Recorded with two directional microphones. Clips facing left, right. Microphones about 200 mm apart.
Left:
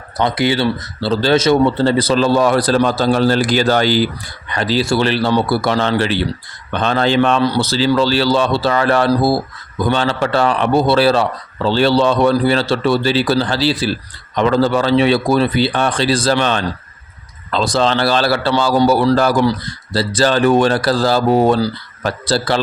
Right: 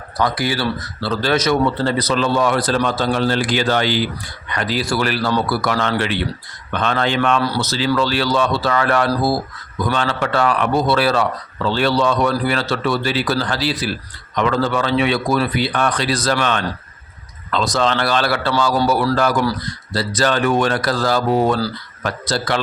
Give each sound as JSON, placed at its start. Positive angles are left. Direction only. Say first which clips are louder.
{"t": 0.2, "sound": "a man's voice", "louder": "left 4 dB", "side_deg": 25}